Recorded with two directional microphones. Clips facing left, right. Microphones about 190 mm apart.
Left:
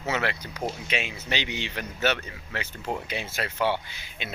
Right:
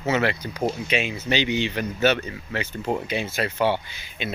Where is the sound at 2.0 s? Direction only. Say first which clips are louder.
Right 5 dB; 30° right (ahead or behind).